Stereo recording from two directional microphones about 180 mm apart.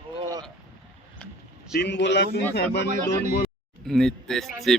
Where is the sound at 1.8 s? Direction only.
75° left (ahead or behind).